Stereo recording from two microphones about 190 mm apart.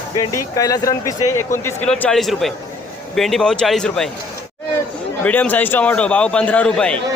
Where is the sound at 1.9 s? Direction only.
5° left (ahead or behind).